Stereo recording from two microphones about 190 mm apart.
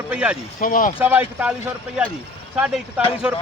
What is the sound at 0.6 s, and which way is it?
Speech, 45° left (ahead or behind).